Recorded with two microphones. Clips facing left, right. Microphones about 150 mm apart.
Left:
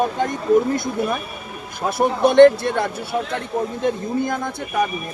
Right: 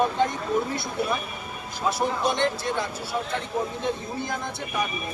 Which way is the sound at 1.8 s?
55° left (ahead or behind).